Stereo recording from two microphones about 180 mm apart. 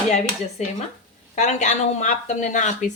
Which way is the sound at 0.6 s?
40° left (ahead or behind).